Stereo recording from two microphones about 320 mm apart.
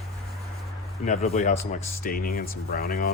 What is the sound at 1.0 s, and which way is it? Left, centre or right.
Speech, left.